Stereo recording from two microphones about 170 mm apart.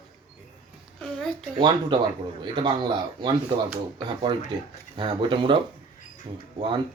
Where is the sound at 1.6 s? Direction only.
30° right (ahead or behind).